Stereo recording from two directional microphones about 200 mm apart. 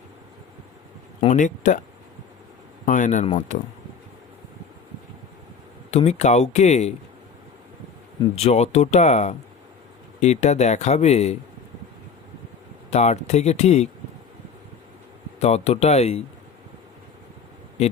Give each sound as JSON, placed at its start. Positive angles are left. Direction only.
{"t": 1.2, "sound": "speech", "side_deg": 35}
{"t": 2.8, "sound": "speech", "side_deg": 40}
{"t": 5.9, "sound": "speech", "side_deg": 35}
{"t": 8.2, "sound": "speech", "side_deg": 30}
{"t": 12.9, "sound": "speech", "side_deg": 35}
{"t": 15.4, "sound": "speech", "side_deg": 35}
{"t": 17.8, "sound": "a man's voice", "side_deg": 35}